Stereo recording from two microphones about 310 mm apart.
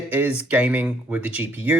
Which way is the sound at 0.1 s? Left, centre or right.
Centre.